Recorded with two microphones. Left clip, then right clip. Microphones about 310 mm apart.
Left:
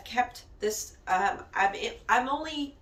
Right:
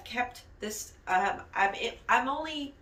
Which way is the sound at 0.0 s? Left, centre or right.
Centre.